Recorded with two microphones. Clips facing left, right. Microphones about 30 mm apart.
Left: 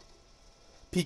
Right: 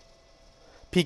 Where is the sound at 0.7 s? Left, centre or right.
Right.